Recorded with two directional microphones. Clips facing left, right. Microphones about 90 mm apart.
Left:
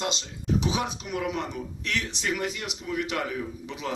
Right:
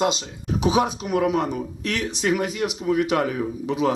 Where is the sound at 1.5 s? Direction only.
45° right (ahead or behind).